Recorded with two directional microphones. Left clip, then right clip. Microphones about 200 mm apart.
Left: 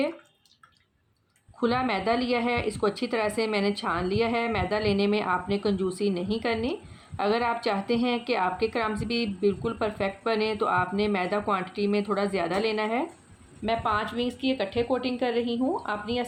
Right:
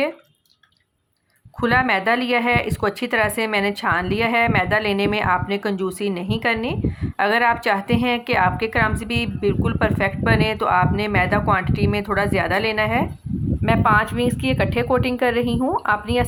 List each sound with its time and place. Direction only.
1.6 s a woman's voice: 15° right (ahead or behind)